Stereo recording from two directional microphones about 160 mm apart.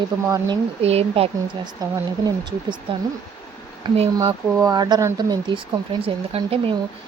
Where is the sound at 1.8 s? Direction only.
25° right (ahead or behind).